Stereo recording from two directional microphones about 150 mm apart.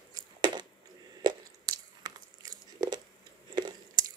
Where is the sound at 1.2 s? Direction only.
25° right (ahead or behind).